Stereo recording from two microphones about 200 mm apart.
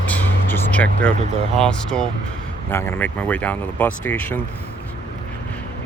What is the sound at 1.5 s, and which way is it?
Speech, 5° left (ahead or behind).